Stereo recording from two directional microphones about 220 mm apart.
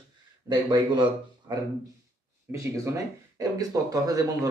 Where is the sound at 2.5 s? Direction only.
15° right (ahead or behind).